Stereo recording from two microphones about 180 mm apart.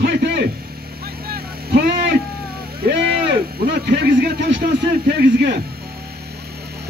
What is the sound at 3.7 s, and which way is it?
Speech, 65° right (ahead or behind).